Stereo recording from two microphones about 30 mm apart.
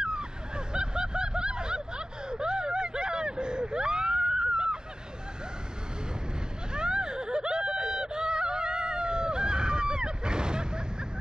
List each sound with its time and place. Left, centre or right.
0.0 s a sound: right
0.7 s snicker: right
6.7 s snicker: right